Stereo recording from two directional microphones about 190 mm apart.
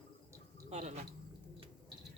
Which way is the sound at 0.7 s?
35° right (ahead or behind).